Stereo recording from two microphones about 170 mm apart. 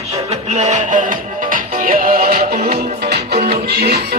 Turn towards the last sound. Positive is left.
turn(degrees=-70)  # may be behind; listen again after turning